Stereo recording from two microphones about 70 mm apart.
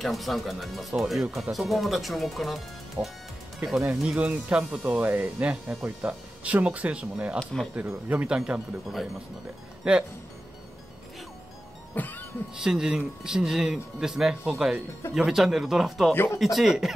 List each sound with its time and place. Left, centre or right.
0.0 s speech: centre
4.0 s speech: centre
8.5 s speech: centre
9.8 s speech: centre
11.9 s music: left
12.5 s speech: centre
16.1 s speech: left
16.3 s speech: centre